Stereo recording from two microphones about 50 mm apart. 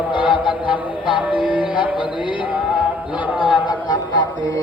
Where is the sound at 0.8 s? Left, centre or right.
Right.